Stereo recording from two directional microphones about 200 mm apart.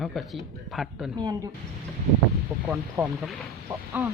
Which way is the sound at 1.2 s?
20° right (ahead or behind).